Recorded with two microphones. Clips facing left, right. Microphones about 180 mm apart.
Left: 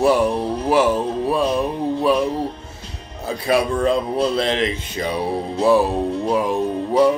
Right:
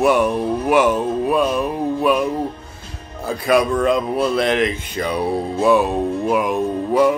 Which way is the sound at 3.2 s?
30° left (ahead or behind).